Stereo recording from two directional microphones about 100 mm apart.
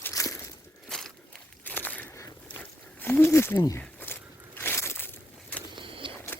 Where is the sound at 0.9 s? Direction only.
5° left (ahead or behind).